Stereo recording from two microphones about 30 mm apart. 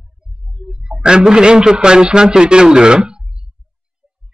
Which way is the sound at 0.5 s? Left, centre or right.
Right.